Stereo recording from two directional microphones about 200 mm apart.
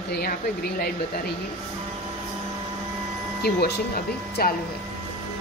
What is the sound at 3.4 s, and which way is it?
A woman's voice, 55° left (ahead or behind).